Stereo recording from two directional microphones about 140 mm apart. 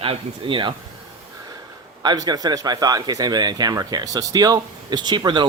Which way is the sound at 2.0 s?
30° right (ahead or behind).